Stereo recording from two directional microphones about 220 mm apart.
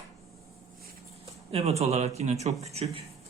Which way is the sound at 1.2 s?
25° right (ahead or behind).